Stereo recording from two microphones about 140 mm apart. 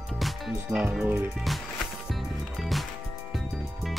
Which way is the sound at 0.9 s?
10° right (ahead or behind).